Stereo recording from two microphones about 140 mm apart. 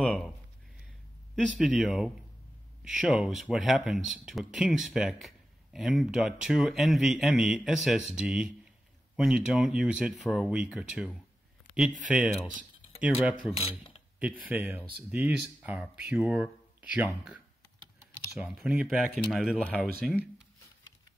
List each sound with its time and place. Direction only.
0.0 s speech: 10° left (ahead or behind)
1.6 s speech: 5° right (ahead or behind)
12.1 s speech: 5° right (ahead or behind)
13.6 s speech: 45° left (ahead or behind)
14.4 s speech: 10° right (ahead or behind)